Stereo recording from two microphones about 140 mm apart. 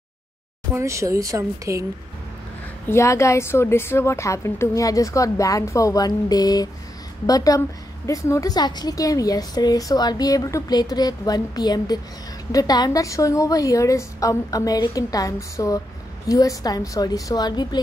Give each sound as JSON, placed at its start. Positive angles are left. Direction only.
{"t": 0.7, "sound": "a woman's voice", "side_deg": -20}
{"t": 2.9, "sound": "a woman's voice", "side_deg": 20}